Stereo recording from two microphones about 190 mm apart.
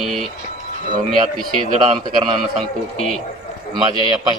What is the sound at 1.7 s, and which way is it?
Speech, 30° right (ahead or behind).